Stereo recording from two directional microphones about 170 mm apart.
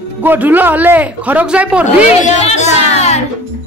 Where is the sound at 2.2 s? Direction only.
40° left (ahead or behind).